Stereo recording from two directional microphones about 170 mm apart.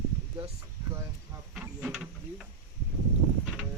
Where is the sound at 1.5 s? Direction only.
5° right (ahead or behind).